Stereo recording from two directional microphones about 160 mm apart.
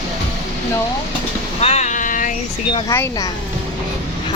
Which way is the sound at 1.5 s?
40° left (ahead or behind).